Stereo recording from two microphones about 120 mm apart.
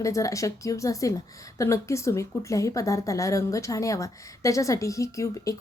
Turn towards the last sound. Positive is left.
turn(degrees=25)  # may be behind; listen again after turning